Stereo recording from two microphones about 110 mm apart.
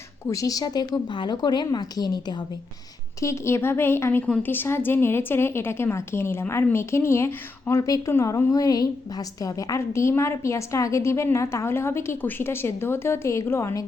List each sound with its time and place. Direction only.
0.3 s a woman's voice: 30° left (ahead or behind)
3.2 s a woman's voice: 25° left (ahead or behind)